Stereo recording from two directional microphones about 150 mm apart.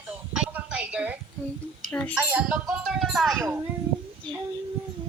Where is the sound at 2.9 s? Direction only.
Centre (ahead or behind).